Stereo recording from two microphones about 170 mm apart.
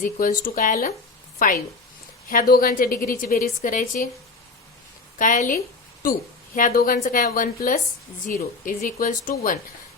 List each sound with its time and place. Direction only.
0.0 s a woman's voice: 55° left (ahead or behind)
5.1 s speech: 50° left (ahead or behind)
6.6 s a woman's voice: 55° left (ahead or behind)